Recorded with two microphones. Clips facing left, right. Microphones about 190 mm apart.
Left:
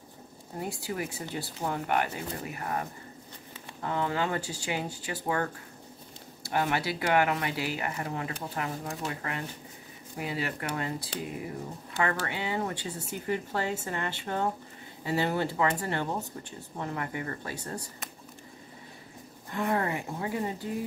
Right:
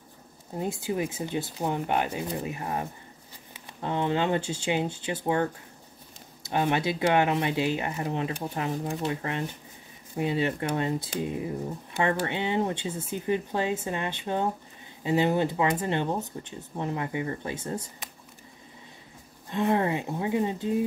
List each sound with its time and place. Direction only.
0.6 s speech: 20° right (ahead or behind)
19.5 s speech: 20° right (ahead or behind)